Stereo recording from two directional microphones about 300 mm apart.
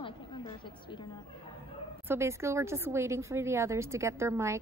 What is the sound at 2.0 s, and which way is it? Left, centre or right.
A woman's voice, centre.